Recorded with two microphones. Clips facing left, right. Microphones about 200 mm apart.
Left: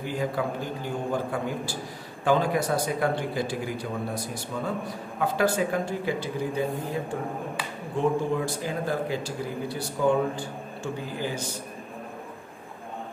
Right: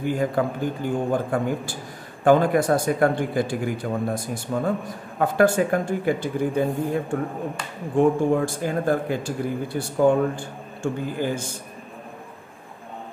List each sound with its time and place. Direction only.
0.0 s speech: 50° right (ahead or behind)
8.0 s speech: 50° right (ahead or behind)